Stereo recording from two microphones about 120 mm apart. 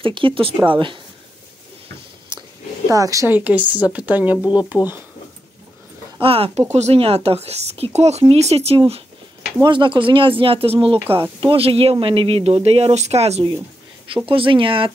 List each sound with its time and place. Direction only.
0.0 s speech: 45° right (ahead or behind)
2.3 s a sound: 40° right (ahead or behind)
2.9 s a woman's voice: 30° right (ahead or behind)
3.3 s speech: 15° right (ahead or behind)
4.7 s speech: 25° left (ahead or behind)
6.1 s speech: 50° right (ahead or behind)
9.6 s speech: 40° right (ahead or behind); by 13.5 s 60° right (ahead or behind)
14.0 s speech: 45° right (ahead or behind)